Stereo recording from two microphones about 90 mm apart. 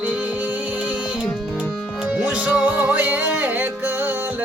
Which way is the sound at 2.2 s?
15° right (ahead or behind).